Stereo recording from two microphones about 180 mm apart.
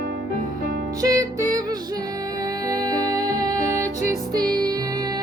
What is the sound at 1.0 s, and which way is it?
Music, 20° right (ahead or behind).